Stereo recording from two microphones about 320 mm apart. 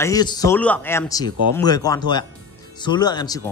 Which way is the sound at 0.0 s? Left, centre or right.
Centre.